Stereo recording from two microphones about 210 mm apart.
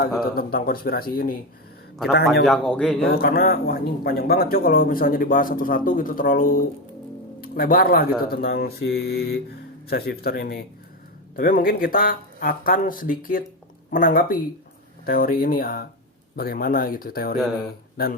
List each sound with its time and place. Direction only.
0.3 s speech: 45° left (ahead or behind)
2.4 s a man's voice: centre (ahead or behind)
3.2 s speech: 45° left (ahead or behind)